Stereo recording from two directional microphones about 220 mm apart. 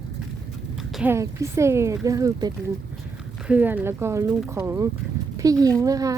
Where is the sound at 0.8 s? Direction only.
Centre (ahead or behind).